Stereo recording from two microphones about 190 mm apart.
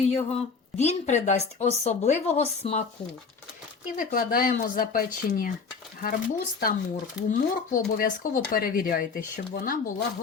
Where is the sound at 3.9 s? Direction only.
50° left (ahead or behind).